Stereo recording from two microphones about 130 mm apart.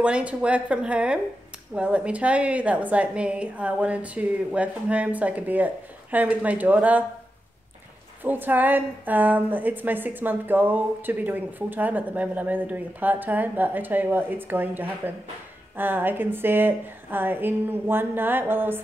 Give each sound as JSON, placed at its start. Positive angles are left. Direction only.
{"t": 0.0, "sound": "a woman's voice", "side_deg": -10}
{"t": 8.2, "sound": "a woman's voice", "side_deg": -15}